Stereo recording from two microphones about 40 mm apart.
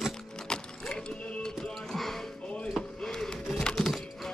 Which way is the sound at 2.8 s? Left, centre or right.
Centre.